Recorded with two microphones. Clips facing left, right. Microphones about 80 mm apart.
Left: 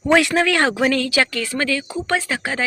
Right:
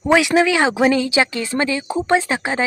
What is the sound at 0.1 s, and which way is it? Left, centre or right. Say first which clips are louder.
A woman's voice: right 2 dB; centre.